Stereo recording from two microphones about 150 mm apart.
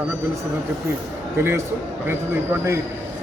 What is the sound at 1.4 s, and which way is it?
Speech, 15° right (ahead or behind).